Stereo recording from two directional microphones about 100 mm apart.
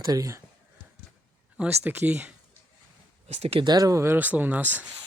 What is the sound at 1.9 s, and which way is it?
Speech, 20° right (ahead or behind).